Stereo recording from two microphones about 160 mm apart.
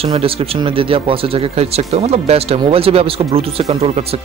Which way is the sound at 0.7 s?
35° right (ahead or behind).